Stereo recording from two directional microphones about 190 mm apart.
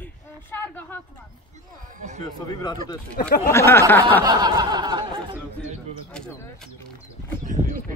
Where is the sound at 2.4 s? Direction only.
20° left (ahead or behind).